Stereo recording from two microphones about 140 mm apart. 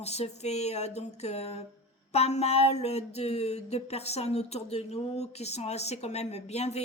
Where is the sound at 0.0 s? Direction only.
50° left (ahead or behind).